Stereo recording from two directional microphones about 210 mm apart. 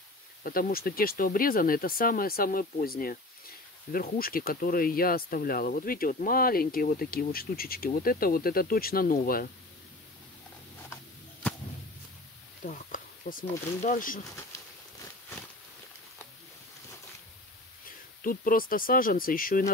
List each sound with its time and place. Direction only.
0.4 s speech: 45° left (ahead or behind)
12.6 s speech: 40° left (ahead or behind)
17.8 s speech: 40° left (ahead or behind)